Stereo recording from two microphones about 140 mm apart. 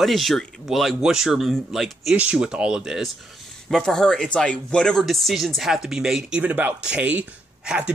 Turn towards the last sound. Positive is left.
turn(degrees=-5)  # may be behind; listen again after turning